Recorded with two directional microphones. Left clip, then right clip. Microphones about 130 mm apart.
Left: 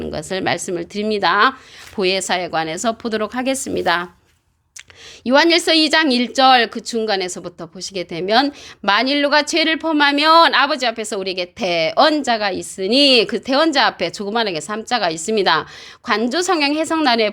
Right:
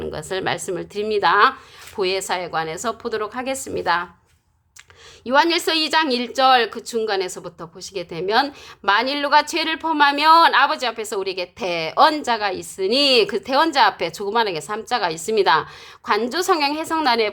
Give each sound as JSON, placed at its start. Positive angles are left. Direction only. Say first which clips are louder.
{"t": 0.0, "sound": "a woman's voice", "louder": "left 3 dB", "side_deg": 30}
{"t": 2.0, "sound": "a woman's voice", "louder": "left 4 dB", "side_deg": 45}
{"t": 5.2, "sound": "a woman's voice", "louder": "left 4 dB", "side_deg": 40}